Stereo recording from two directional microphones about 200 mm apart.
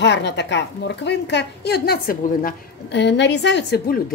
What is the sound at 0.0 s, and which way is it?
A woman's voice, 60° left (ahead or behind).